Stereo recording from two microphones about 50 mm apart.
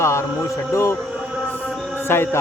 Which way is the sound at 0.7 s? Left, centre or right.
Left.